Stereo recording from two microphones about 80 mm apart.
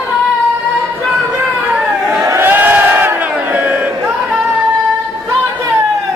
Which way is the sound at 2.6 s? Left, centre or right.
Right.